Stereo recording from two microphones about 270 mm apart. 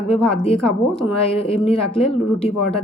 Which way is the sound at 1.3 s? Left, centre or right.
Left.